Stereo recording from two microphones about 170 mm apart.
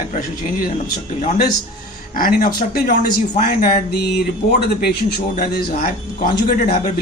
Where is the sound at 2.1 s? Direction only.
55° left (ahead or behind).